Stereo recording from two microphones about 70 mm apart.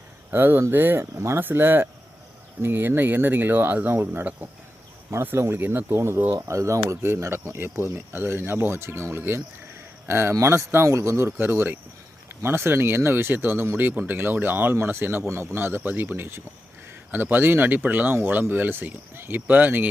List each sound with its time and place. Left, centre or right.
0.3 s speech: right
6.5 s speech: right